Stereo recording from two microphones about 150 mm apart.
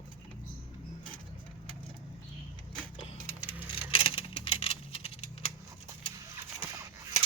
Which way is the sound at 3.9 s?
35° left (ahead or behind).